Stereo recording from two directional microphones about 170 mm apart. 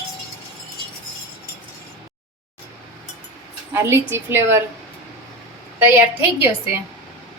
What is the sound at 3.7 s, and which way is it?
Speech, 15° right (ahead or behind).